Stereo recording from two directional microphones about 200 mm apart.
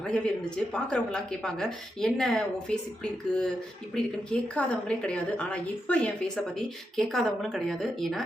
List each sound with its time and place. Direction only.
0.0 s a woman's voice: 5° left (ahead or behind)